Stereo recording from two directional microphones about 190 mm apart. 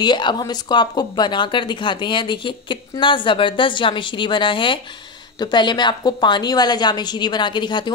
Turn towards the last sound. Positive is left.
turn(degrees=25)  # may be behind; listen again after turning